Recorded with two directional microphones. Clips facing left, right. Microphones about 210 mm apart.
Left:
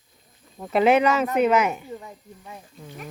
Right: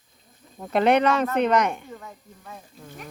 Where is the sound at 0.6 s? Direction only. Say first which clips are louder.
Left 1 dB; 5° left (ahead or behind).